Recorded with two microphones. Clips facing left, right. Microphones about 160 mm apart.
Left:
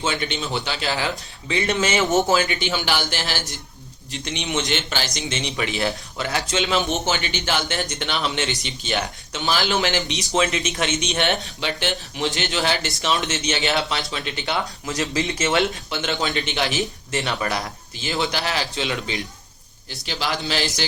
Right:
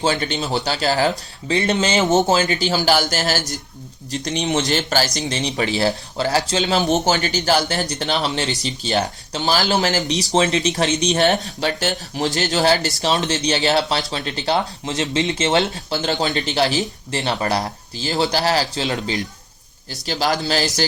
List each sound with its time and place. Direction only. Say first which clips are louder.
0.0 s speech: right 4 dB; 35° right (ahead or behind); by 2.3 s 20° right (ahead or behind)
2.3 s speech: right 3 dB; 40° right (ahead or behind)